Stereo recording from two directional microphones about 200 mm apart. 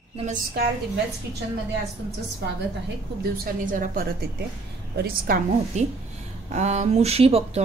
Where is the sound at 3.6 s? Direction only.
40° right (ahead or behind).